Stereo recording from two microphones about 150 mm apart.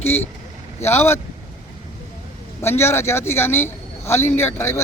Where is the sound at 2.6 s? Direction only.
15° left (ahead or behind).